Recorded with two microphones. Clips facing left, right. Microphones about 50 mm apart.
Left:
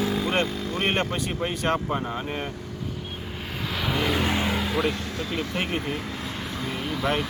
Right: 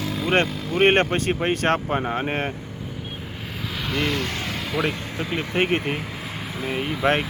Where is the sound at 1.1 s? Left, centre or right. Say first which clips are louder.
Right 6 dB; right.